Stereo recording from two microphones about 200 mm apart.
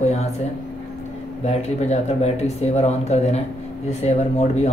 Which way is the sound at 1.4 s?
35° left (ahead or behind).